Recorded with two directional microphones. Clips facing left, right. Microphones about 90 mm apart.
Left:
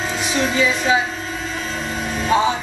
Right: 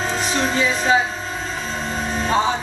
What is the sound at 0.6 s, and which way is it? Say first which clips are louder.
Speech: left 1 dB; 35° right (ahead or behind).